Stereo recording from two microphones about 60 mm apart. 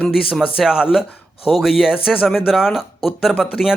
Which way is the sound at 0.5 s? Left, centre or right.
Centre.